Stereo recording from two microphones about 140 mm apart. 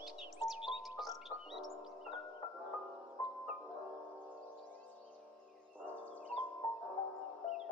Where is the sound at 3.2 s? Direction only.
20° left (ahead or behind).